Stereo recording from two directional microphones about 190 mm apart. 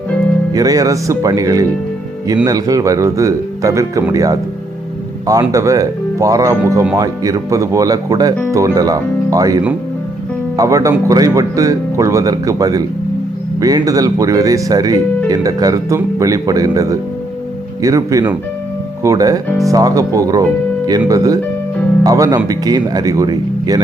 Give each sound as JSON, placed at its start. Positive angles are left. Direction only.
{"t": 0.5, "sound": "speech", "side_deg": -20}
{"t": 10.6, "sound": "speech", "side_deg": -15}